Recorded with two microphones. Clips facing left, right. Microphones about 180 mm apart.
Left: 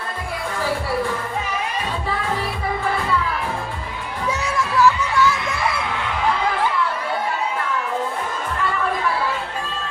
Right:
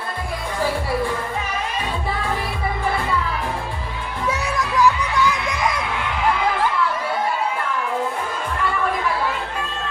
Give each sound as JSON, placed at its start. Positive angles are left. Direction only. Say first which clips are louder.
{"t": 4.6, "sound": "music", "louder": "left 1 dB", "side_deg": -15}